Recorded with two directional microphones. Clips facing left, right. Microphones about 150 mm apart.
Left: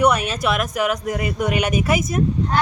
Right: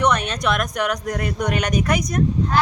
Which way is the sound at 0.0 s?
10° left (ahead or behind).